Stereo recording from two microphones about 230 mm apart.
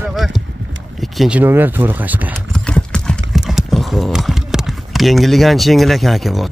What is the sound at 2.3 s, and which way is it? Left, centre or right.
Clip-clop, centre.